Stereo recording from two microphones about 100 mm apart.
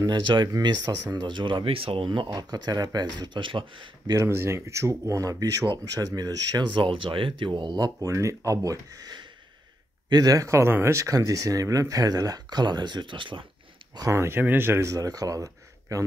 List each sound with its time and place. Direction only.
0.0 s speech: 50° right (ahead or behind)
1.2 s speech: 55° right (ahead or behind)
2.0 s speech: 45° right (ahead or behind)
4.1 s speech: 30° right (ahead or behind); by 13.5 s 55° right (ahead or behind)
13.9 s speech: 30° right (ahead or behind)